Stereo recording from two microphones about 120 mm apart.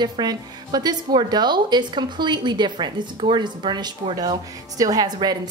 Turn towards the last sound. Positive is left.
turn(degrees=-35)  # may be behind; listen again after turning